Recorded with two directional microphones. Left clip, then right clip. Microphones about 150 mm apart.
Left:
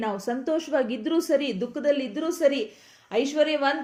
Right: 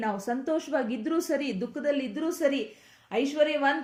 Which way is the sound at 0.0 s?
30° left (ahead or behind).